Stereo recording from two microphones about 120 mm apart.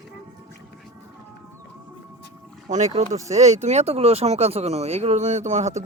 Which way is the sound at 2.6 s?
90° right.